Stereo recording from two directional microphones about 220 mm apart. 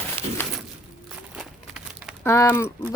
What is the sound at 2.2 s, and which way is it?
Speech, 10° left (ahead or behind).